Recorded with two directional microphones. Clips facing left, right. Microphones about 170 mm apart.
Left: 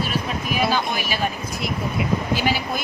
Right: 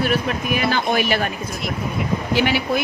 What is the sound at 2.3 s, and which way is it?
Speech, 70° right (ahead or behind).